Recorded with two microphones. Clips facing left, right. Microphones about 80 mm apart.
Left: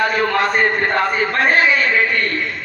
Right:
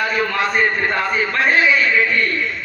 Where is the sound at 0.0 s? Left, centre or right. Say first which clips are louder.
Left 3 dB; left.